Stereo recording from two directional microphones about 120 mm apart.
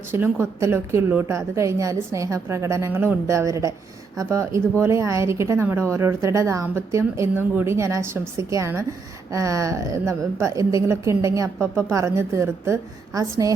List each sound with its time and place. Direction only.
0.1 s a woman's voice: 20° right (ahead or behind)